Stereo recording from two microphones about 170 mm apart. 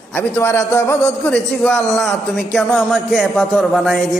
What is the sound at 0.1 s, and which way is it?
A man's voice, 15° left (ahead or behind).